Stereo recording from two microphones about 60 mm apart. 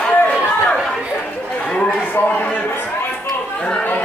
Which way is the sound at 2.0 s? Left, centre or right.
Left.